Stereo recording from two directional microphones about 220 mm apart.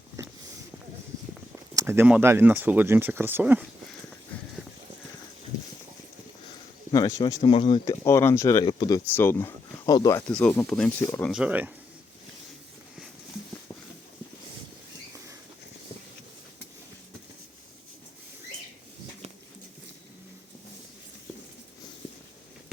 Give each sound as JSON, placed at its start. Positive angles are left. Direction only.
{"t": 0.2, "sound": "a sound", "side_deg": -15}
{"t": 1.7, "sound": "speech", "side_deg": -10}
{"t": 6.9, "sound": "speech", "side_deg": 15}
{"t": 8.0, "sound": "speech", "side_deg": 10}